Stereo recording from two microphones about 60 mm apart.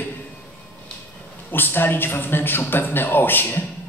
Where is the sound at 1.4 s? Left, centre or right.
Left.